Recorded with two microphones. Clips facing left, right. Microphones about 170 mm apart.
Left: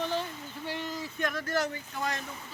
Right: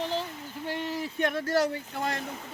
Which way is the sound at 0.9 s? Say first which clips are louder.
Right 5 dB; 25° right (ahead or behind).